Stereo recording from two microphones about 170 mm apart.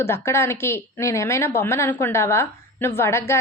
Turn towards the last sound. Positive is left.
turn(degrees=15)  # may be behind; listen again after turning